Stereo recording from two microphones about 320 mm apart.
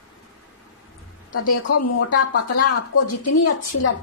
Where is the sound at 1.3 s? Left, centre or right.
Left.